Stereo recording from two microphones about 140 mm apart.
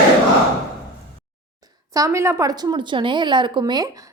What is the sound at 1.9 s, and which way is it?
Speech, 20° right (ahead or behind).